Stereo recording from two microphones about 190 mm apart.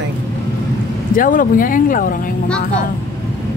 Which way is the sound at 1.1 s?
45° left (ahead or behind).